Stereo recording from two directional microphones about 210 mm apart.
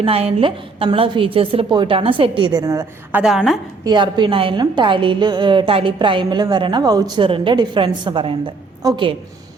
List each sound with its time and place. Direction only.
0.0 s a woman's voice: 30° right (ahead or behind); by 3.6 s centre (ahead or behind)
3.8 s a woman's voice: 20° right (ahead or behind)